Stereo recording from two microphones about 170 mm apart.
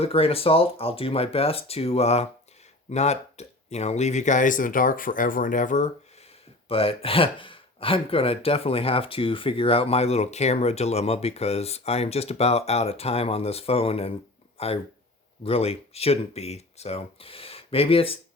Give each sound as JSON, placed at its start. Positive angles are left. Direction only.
{"t": 0.0, "sound": "speech", "side_deg": 35}
{"t": 6.7, "sound": "speech", "side_deg": 35}